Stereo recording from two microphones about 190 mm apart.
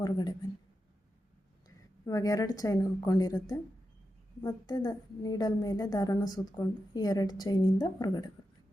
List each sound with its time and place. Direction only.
0.0 s a woman's voice: 20° left (ahead or behind)
1.6 s a woman's voice: 20° left (ahead or behind)